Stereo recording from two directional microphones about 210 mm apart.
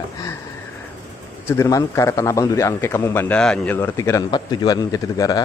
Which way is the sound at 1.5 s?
15° left (ahead or behind).